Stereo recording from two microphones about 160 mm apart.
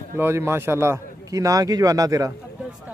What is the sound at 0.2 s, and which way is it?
A man's voice, 15° right (ahead or behind).